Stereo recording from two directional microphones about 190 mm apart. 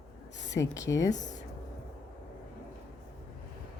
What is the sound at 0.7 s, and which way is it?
Speech, 15° left (ahead or behind).